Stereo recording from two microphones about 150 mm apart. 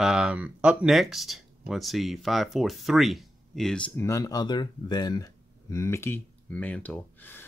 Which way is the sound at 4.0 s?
20° left (ahead or behind).